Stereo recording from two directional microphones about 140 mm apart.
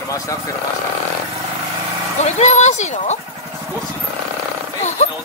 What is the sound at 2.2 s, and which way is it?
Speech, 55° left (ahead or behind).